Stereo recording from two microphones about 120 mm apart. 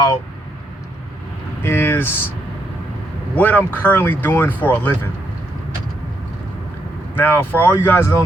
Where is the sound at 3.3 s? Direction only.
15° left (ahead or behind).